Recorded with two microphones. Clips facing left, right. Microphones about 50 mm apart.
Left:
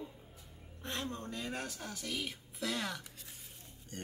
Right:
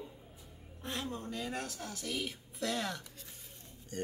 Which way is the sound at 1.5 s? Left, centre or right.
Centre.